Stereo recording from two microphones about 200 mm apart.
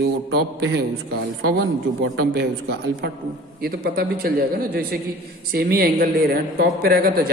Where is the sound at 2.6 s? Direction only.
55° right (ahead or behind).